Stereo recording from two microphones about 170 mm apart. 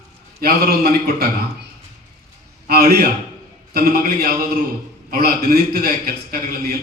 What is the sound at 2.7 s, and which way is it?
A man's voice, 65° right (ahead or behind).